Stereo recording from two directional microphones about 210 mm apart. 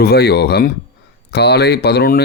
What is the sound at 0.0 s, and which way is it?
Speech, 50° left (ahead or behind).